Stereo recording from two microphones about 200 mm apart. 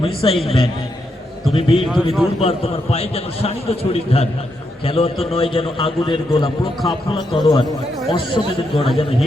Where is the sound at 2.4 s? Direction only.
30° left (ahead or behind).